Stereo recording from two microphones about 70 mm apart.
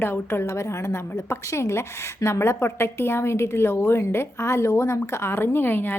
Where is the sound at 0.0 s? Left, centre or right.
Left.